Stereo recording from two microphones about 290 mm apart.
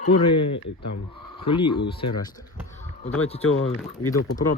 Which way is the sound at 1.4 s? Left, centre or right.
Centre.